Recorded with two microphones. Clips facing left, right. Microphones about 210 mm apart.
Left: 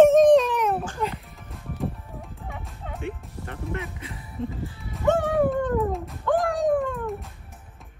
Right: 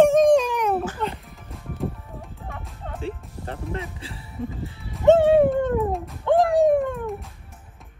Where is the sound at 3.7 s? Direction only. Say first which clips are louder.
Right 1 dB; 30° right (ahead or behind).